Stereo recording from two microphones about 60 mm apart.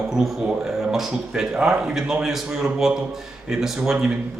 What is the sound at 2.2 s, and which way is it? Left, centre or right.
Speech, centre.